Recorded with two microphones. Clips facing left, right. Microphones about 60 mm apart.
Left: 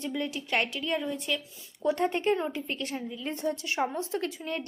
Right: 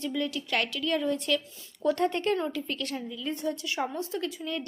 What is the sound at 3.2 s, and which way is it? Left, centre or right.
A woman's voice, left.